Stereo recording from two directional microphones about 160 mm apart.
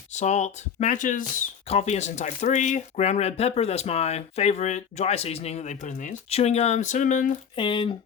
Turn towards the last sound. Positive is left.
turn(degrees=30)  # may be behind; listen again after turning